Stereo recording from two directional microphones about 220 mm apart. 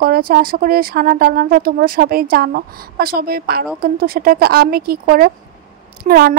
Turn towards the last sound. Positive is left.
turn(degrees=-45)  # may be behind; listen again after turning